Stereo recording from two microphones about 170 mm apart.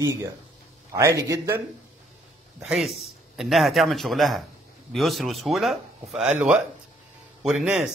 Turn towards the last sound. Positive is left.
turn(degrees=-5)  # may be behind; listen again after turning